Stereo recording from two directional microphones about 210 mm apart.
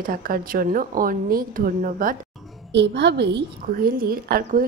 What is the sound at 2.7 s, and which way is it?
A woman's voice, 55° right (ahead or behind).